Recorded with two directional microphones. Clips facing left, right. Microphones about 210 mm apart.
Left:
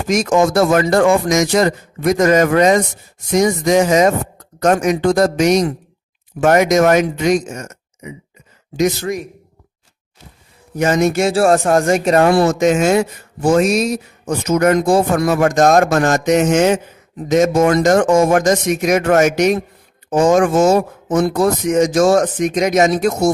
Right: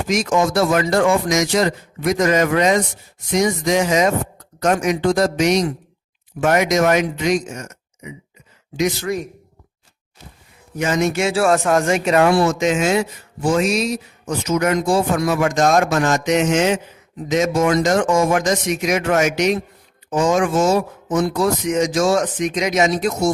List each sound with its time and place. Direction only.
0.1 s speech: 45° left (ahead or behind)
10.8 s speech: 45° left (ahead or behind)